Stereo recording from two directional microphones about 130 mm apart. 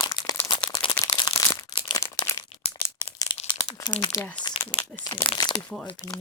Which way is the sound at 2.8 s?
30° left (ahead or behind).